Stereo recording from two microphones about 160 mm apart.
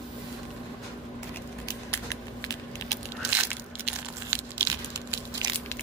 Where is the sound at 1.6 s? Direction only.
25° left (ahead or behind).